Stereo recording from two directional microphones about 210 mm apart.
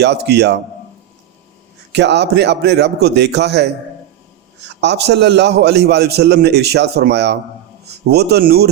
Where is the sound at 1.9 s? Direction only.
55° right (ahead or behind).